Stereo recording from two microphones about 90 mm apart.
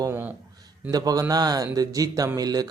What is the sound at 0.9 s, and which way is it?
Speech, 45° right (ahead or behind).